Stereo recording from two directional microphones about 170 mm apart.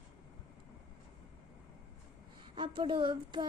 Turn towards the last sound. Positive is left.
turn(degrees=-30)  # may be behind; listen again after turning